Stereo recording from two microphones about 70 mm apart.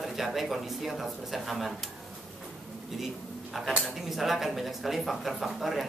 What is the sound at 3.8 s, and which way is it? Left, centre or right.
Speech, centre.